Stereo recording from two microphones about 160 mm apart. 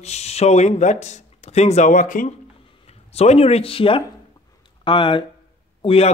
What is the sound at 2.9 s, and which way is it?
Speech, 40° left (ahead or behind).